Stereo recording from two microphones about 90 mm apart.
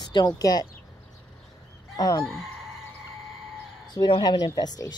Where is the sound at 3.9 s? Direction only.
50° left (ahead or behind).